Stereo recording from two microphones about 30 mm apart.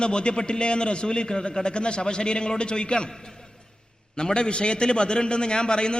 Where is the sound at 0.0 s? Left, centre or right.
Left.